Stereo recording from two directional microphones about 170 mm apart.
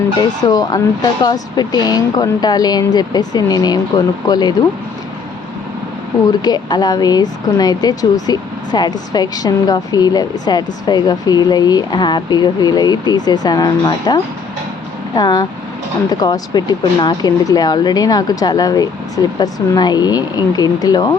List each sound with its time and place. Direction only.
0.1 s speech: 25° left (ahead or behind)
6.4 s speech: 25° left (ahead or behind)